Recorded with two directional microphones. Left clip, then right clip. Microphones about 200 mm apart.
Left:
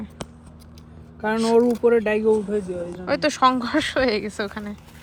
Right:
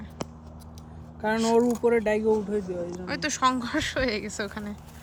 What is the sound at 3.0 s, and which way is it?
Speech, 10° left (ahead or behind).